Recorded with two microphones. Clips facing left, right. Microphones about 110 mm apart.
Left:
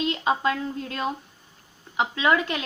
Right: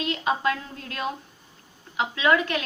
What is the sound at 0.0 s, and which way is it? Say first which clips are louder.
A woman's voice: left 1 dB; 25° left (ahead or behind).